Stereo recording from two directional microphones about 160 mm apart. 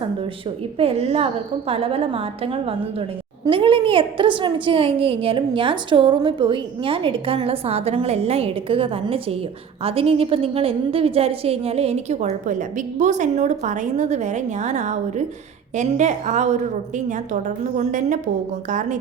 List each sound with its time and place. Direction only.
0.0 s a woman's voice: 35° right (ahead or behind); by 18.9 s 50° right (ahead or behind)